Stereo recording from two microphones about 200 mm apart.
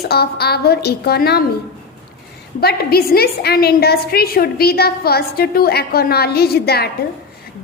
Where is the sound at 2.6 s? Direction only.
50° left (ahead or behind).